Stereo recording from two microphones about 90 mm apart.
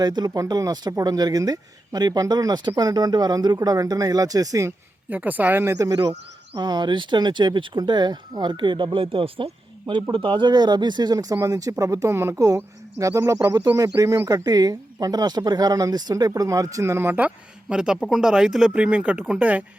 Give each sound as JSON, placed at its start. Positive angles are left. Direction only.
{"t": 0.0, "sound": "speech", "side_deg": -50}
{"t": 5.0, "sound": "speech", "side_deg": -20}
{"t": 5.7, "sound": "speech", "side_deg": -40}
{"t": 6.6, "sound": "speech", "side_deg": -55}